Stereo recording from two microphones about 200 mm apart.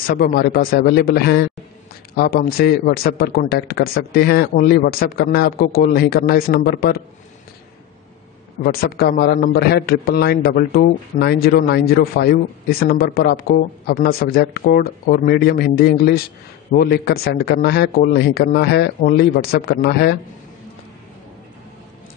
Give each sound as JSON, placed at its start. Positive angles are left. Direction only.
{"t": 0.0, "sound": "a man's voice", "side_deg": 50}
{"t": 8.6, "sound": "a man's voice", "side_deg": 55}